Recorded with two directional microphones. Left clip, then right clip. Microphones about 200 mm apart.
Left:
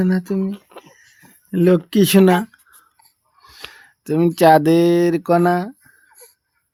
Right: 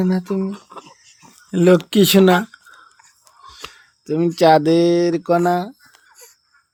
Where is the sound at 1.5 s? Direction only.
35° left (ahead or behind).